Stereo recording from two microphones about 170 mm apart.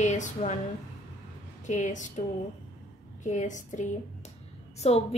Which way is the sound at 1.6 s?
45° left (ahead or behind).